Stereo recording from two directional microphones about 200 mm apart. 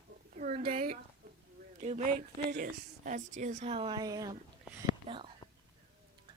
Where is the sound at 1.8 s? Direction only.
35° right (ahead or behind).